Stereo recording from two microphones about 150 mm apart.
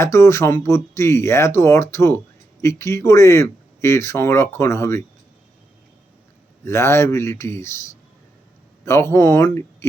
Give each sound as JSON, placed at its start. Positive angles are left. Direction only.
{"t": 0.0, "sound": "speech", "side_deg": 20}
{"t": 6.7, "sound": "speech", "side_deg": 15}